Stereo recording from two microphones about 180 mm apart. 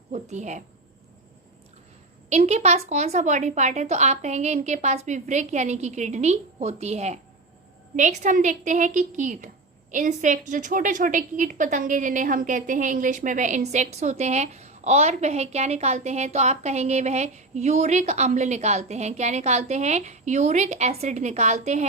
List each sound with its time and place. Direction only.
0.1 s speech: 40° right (ahead or behind)
2.3 s a woman's voice: 40° right (ahead or behind)